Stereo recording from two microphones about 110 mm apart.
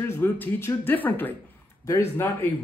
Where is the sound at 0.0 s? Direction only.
20° left (ahead or behind).